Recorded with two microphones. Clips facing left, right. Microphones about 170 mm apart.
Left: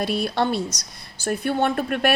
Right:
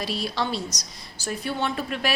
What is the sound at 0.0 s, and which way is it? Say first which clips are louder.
A woman's voice: left 5 dB; 55° left (ahead or behind).